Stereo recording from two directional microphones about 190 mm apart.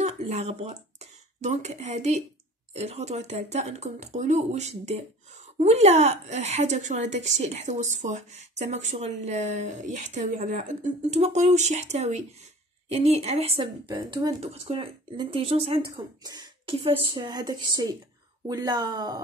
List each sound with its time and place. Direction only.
0.0 s a woman's voice: 35° right (ahead or behind)
14.4 s speech: 30° right (ahead or behind)